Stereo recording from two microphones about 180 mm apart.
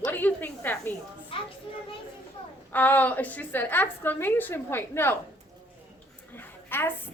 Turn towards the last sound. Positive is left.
turn(degrees=10)  # may be behind; listen again after turning